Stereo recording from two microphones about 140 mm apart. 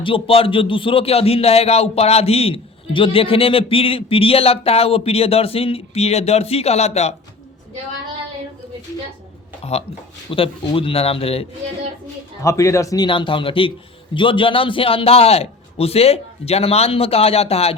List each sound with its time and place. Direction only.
0.0 s speech: 40° left (ahead or behind)
10.2 s speech: 40° left (ahead or behind)
12.4 s speech: 20° left (ahead or behind)
13.1 s speech: 35° left (ahead or behind)